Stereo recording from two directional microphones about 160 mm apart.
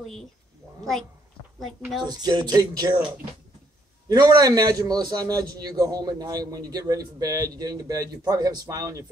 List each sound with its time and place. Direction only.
2.0 s a man's voice: 25° right (ahead or behind)
4.1 s a man's voice: 25° right (ahead or behind)